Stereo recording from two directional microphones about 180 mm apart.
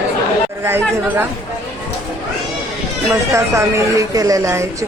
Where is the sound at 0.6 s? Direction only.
15° right (ahead or behind).